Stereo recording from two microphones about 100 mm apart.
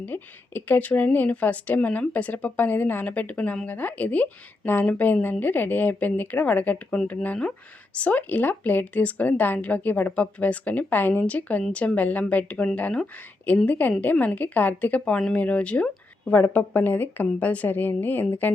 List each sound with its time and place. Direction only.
0.0 s speech: 20° left (ahead or behind)